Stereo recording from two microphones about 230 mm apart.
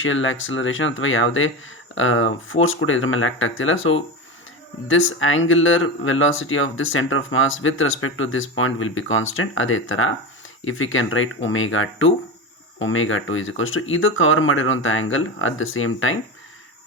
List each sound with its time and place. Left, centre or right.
0.0 s speech: left